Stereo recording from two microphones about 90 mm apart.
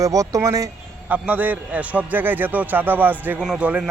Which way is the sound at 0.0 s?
40° right (ahead or behind).